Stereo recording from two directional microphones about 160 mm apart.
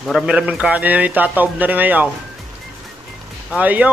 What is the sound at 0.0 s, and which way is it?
Speech, 5° right (ahead or behind).